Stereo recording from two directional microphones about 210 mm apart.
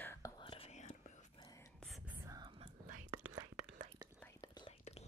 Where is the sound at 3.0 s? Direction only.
90° right.